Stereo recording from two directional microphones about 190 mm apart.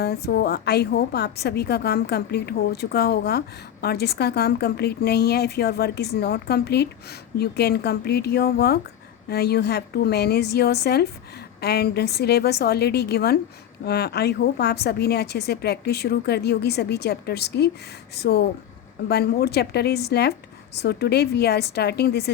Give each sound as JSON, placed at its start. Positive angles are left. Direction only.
{"t": 0.0, "sound": "a woman's voice", "side_deg": 55}